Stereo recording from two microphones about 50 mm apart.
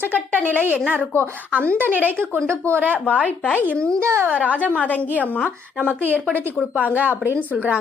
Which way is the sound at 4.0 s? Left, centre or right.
Right.